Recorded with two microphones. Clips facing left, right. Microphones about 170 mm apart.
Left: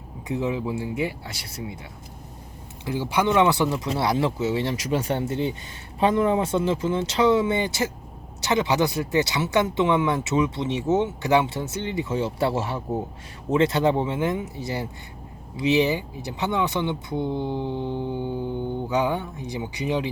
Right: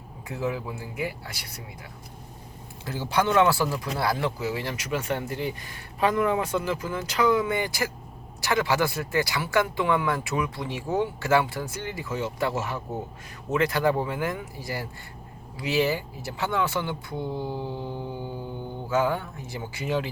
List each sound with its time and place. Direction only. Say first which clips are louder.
0.3 s speech: left 4 dB; 20° left (ahead or behind)
2.8 s speech: left 2 dB; 15° left (ahead or behind)